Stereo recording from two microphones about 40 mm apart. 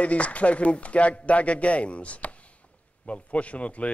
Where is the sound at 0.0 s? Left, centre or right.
Left.